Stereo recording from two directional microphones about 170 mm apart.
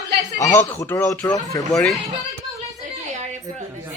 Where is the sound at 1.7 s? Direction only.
5° left (ahead or behind).